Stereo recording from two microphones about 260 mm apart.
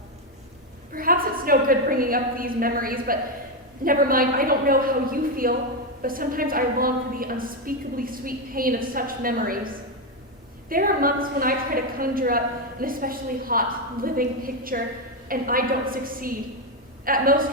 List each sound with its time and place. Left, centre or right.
0.9 s a woman's voice: right